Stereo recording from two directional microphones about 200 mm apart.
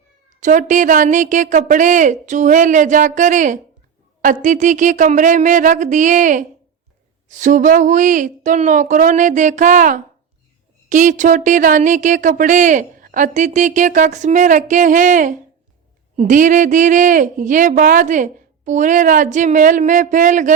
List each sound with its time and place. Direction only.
0.3 s speech: 35° right (ahead or behind)